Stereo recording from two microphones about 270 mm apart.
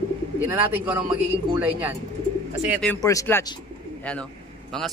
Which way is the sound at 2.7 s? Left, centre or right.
Centre.